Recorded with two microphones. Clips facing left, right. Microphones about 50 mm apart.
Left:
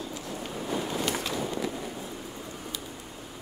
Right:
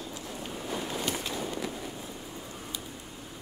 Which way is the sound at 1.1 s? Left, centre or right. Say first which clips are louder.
Left 3 dB; left.